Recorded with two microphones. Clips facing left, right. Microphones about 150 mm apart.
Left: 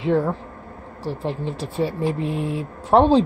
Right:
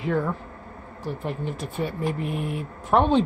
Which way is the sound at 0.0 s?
30° left (ahead or behind).